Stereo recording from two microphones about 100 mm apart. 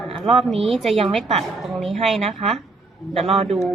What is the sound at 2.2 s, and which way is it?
Speech, 90° right.